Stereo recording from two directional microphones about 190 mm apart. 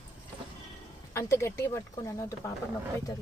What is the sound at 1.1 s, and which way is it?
Speech, 15° left (ahead or behind).